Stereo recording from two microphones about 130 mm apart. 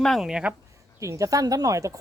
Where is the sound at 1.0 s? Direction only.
25° right (ahead or behind).